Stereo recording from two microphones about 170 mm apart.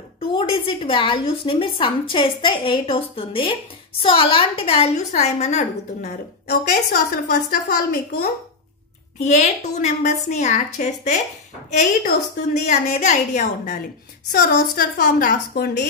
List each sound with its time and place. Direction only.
0.3 s a woman's voice: 30° left (ahead or behind)
6.4 s a woman's voice: 60° left (ahead or behind)
9.2 s a woman's voice: 40° left (ahead or behind)
12.6 s a woman's voice: 45° left (ahead or behind); by 15.9 s 65° left (ahead or behind)